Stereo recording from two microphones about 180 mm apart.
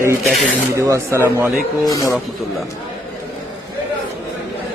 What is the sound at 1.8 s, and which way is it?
Speech, 20° left (ahead or behind).